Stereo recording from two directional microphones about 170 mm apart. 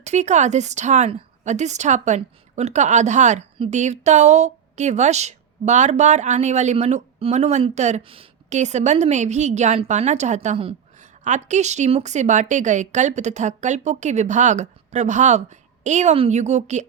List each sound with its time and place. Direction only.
0.0 s a woman's voice: 40° right (ahead or behind)